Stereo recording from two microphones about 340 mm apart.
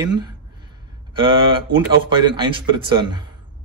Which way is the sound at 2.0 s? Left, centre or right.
Centre.